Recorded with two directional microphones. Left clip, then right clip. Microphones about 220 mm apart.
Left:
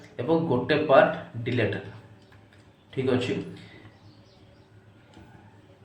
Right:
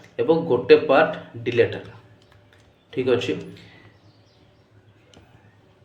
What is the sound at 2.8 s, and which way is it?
Speech, 35° right (ahead or behind).